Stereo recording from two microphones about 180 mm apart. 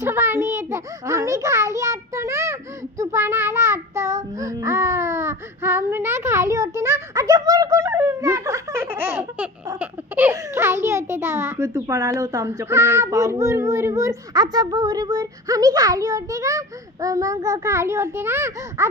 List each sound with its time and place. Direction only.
0.0 s a child's voice: 15° right (ahead or behind)